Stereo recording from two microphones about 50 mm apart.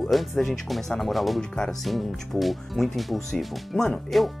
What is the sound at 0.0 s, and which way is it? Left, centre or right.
Speech, centre.